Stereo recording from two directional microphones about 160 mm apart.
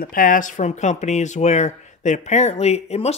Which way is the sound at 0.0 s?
60° left (ahead or behind).